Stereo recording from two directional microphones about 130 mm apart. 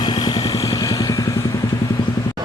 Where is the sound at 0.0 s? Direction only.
35° left (ahead or behind).